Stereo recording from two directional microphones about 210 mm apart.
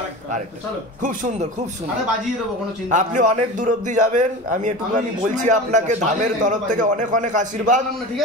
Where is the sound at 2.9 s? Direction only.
35° right (ahead or behind).